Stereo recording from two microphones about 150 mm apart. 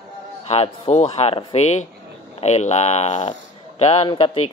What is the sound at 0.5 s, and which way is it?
A man's voice, 45° left (ahead or behind).